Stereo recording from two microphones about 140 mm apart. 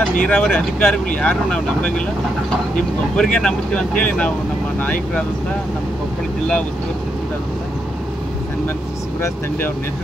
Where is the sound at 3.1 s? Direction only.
5° left (ahead or behind).